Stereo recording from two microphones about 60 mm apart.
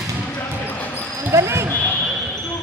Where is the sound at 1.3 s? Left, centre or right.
Right.